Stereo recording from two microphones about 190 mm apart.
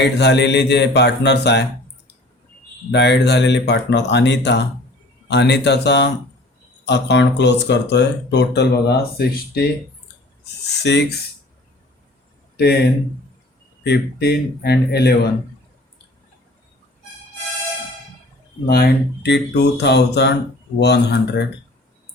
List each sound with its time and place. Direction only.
0.0 s speech: 65° left (ahead or behind)
2.9 s speech: 65° left (ahead or behind)
12.5 s speech: 55° left (ahead or behind)
13.8 s speech: 60° left (ahead or behind)
18.6 s speech: 55° left (ahead or behind)